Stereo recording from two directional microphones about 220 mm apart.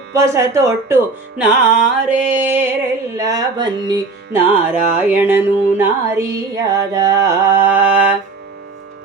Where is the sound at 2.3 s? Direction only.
10° right (ahead or behind).